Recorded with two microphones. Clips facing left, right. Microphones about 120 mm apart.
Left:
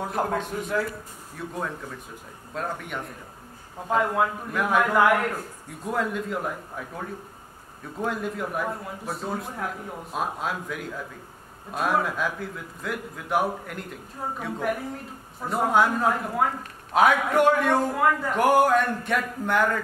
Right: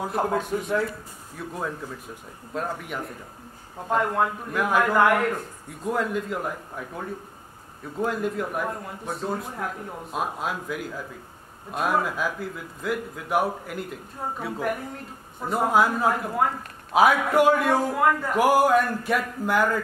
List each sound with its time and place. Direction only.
0.0 s a man's voice: centre (ahead or behind)